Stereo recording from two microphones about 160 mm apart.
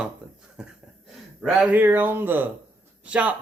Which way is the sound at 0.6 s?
5° right (ahead or behind).